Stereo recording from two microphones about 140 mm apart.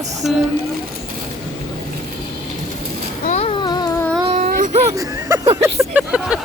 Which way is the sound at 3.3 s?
45° left (ahead or behind).